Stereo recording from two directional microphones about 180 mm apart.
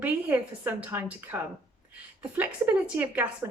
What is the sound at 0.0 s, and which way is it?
A woman's voice, 10° right (ahead or behind).